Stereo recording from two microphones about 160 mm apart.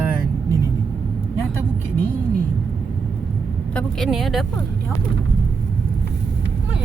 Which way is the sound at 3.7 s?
Centre (ahead or behind).